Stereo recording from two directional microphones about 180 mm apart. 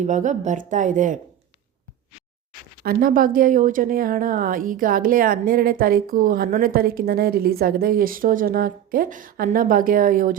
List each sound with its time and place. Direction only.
0.0 s speech: 45° right (ahead or behind)
2.8 s speech: 55° right (ahead or behind)